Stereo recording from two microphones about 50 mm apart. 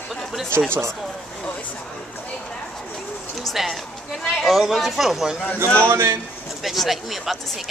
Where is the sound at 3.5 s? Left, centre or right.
Centre.